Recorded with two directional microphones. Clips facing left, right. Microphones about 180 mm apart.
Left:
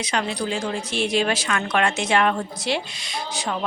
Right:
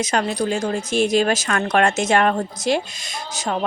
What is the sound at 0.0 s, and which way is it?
Speech, 45° right (ahead or behind).